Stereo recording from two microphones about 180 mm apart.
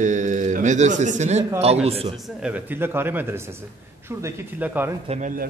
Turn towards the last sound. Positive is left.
turn(degrees=-35)  # may be behind; listen again after turning